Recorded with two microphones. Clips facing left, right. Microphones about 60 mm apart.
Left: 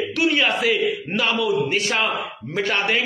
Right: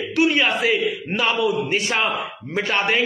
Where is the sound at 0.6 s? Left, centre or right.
Right.